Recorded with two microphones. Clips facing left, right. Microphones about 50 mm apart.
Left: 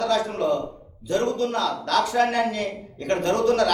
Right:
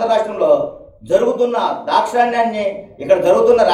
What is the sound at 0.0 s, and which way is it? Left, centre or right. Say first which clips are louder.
A man's voice: right 8 dB; centre.